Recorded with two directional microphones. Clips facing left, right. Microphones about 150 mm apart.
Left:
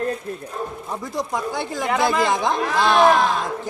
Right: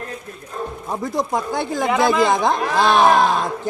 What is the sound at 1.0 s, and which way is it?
Speech, 50° right (ahead or behind).